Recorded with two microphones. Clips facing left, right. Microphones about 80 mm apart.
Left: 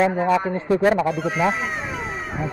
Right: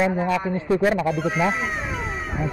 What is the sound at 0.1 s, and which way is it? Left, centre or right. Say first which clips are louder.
Speech: left 3 dB; left.